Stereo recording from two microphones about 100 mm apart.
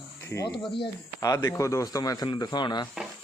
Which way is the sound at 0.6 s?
55° left (ahead or behind).